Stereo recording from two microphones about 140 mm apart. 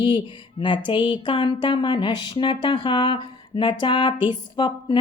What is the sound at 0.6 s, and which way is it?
Speech, 35° left (ahead or behind).